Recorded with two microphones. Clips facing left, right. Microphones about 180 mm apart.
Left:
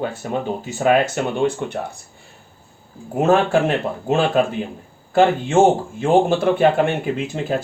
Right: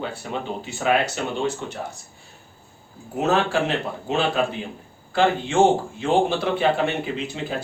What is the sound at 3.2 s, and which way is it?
Speech, 50° left (ahead or behind).